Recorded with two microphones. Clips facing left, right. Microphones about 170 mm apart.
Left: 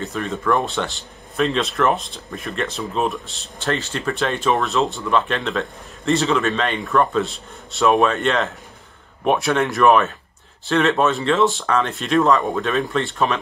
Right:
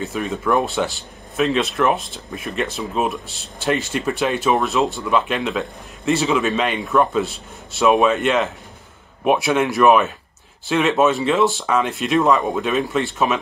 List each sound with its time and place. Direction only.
0.0 s speech: centre (ahead or behind)
3.6 s speech: 15° right (ahead or behind)
12.5 s speech: 15° right (ahead or behind)
13.0 s speech: 5° right (ahead or behind)